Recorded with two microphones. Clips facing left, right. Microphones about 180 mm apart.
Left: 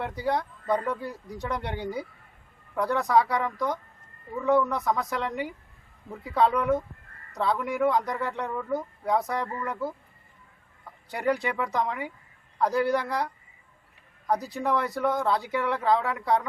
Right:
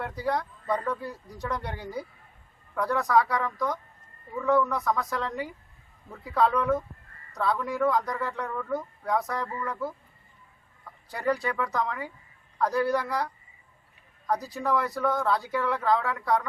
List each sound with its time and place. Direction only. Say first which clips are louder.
0.0 s speech: left 1 dB; 20° left (ahead or behind)
11.1 s speech: left 1 dB; 15° left (ahead or behind)